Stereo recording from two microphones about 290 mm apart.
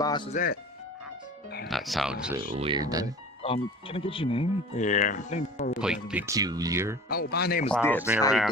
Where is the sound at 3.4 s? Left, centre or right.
Centre.